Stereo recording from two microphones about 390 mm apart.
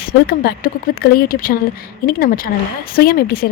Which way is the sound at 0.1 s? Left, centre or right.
Left.